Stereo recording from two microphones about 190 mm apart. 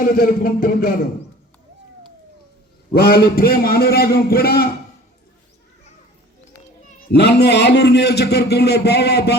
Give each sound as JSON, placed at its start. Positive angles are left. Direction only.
{"t": 0.0, "sound": "a man's voice", "side_deg": 45}
{"t": 2.9, "sound": "a man's voice", "side_deg": 55}
{"t": 7.1, "sound": "a man's voice", "side_deg": 60}